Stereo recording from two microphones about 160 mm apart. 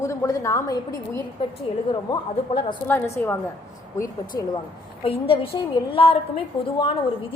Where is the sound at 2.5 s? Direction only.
35° left (ahead or behind).